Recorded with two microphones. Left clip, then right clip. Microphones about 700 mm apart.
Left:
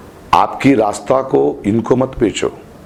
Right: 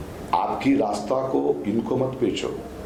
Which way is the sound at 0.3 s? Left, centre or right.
Left.